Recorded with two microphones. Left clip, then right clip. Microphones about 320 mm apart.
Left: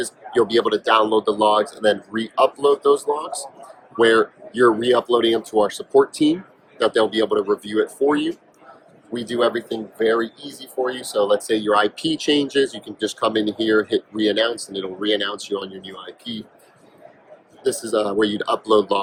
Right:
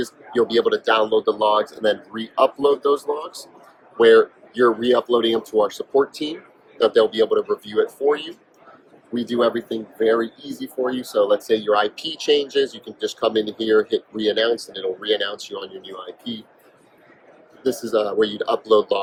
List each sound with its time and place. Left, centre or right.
0.0 s speech: left
10.9 s speech: left
17.6 s speech: left